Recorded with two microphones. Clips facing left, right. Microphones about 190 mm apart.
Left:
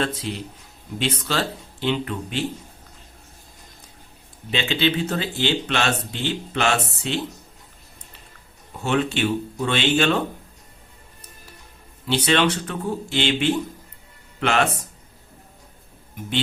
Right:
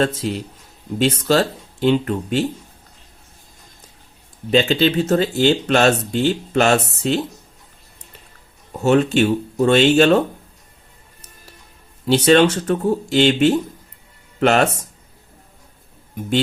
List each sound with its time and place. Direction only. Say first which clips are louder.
0.0 s speech: right 6 dB; 45° right (ahead or behind)
4.5 s speech: right 7 dB; 40° right (ahead or behind)
8.8 s speech: right 7 dB; 40° right (ahead or behind)
12.0 s speech: right 7 dB; 40° right (ahead or behind)